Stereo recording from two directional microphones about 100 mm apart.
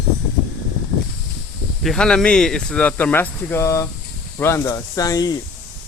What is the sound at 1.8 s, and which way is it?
Speech, 5° left (ahead or behind).